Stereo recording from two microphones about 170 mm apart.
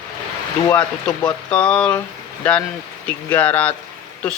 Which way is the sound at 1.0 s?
5° left (ahead or behind).